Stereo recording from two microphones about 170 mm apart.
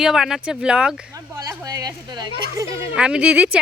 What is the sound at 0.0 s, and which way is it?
Speech, 5° right (ahead or behind).